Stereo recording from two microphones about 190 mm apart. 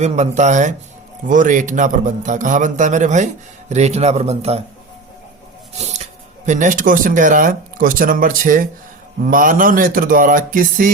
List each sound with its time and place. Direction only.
0.0 s a man's voice: 35° right (ahead or behind)
5.7 s speech: 35° right (ahead or behind)
9.2 s music: 45° right (ahead or behind)